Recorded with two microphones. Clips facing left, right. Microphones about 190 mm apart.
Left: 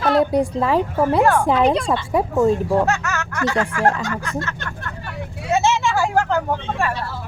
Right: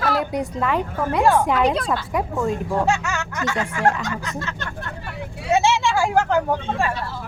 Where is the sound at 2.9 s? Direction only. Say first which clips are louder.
Even; 15° right (ahead or behind).